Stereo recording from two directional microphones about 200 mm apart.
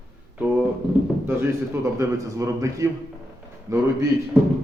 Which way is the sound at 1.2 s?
10° right (ahead or behind).